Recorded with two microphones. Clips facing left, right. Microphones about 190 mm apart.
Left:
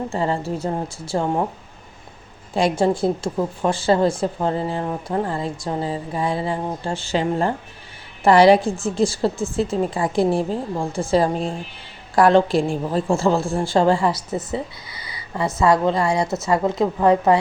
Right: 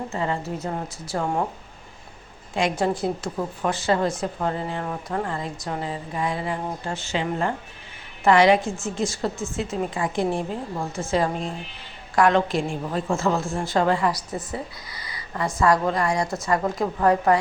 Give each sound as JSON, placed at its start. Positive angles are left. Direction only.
{"t": 0.1, "sound": "a woman's voice", "side_deg": 30}
{"t": 2.6, "sound": "a woman's voice", "side_deg": 30}
{"t": 15.6, "sound": "a woman's voice", "side_deg": 25}